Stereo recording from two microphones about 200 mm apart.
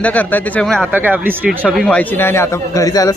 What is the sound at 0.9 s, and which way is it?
A man's voice, 10° right (ahead or behind).